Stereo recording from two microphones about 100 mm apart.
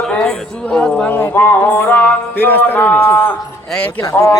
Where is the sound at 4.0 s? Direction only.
25° left (ahead or behind).